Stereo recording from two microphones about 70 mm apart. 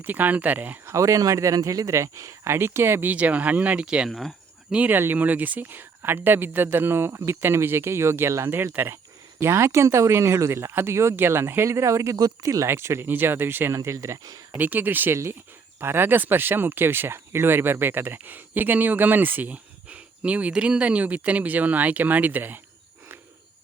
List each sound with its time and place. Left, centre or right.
0.0 s speech: right
0.9 s speech: right
3.2 s speech: right
4.1 s speech: centre
4.7 s speech: right
12.1 s speech: right
12.6 s speech: right
13.7 s speech: right
14.5 s speech: right
15.1 s speech: right